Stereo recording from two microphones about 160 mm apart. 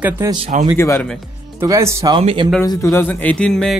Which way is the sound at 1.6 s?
15° right (ahead or behind).